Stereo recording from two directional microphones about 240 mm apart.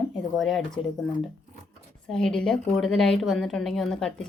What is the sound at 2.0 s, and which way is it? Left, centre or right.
A woman's voice, centre.